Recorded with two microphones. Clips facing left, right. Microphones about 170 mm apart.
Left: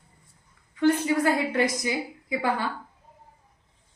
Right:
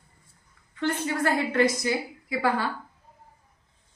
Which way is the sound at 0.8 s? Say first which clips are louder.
Left 5 dB; 15° left (ahead or behind).